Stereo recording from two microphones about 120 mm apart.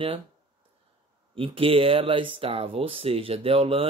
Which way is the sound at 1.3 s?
50° right (ahead or behind).